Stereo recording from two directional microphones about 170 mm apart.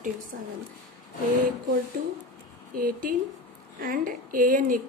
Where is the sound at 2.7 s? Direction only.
55° right (ahead or behind).